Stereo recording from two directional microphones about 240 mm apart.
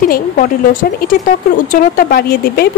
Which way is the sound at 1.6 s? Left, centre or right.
Left.